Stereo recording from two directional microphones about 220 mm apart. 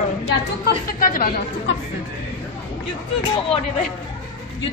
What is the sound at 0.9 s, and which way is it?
Speech, 40° left (ahead or behind).